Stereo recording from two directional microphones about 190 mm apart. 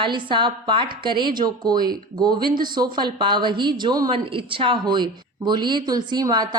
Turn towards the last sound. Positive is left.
turn(degrees=-20)  # may be behind; listen again after turning